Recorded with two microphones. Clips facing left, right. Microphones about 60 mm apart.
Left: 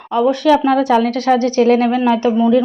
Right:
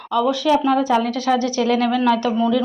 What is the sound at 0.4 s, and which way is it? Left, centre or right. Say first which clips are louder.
Speech: left 5 dB; left.